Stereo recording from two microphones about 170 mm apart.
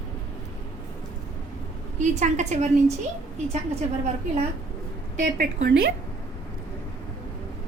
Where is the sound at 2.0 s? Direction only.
45° right (ahead or behind).